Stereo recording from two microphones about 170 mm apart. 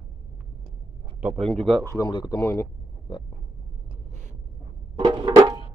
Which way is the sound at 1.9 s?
25° left (ahead or behind).